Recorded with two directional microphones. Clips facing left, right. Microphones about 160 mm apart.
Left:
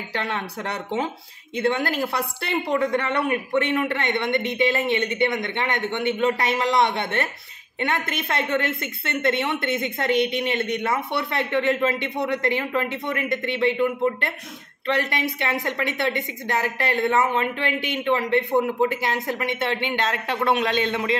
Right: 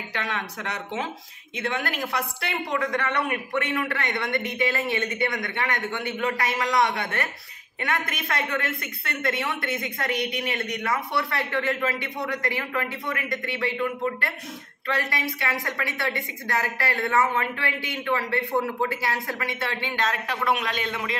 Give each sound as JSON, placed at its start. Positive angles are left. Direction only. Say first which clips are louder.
{"t": 0.1, "sound": "a woman's voice", "louder": "left 3 dB", "side_deg": 30}